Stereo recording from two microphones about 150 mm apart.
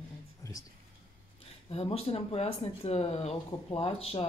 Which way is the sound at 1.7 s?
40° left (ahead or behind).